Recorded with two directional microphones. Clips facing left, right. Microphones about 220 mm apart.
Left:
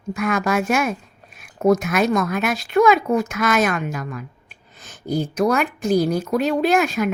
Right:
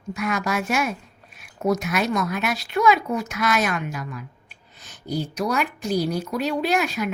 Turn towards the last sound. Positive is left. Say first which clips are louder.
# left 5 dB
turn(degrees=50)  # may be behind; listen again after turning